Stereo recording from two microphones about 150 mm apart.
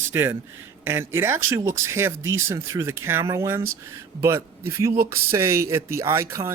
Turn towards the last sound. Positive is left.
turn(degrees=-20)  # may be behind; listen again after turning